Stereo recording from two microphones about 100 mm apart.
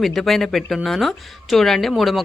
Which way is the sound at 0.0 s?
Centre (ahead or behind).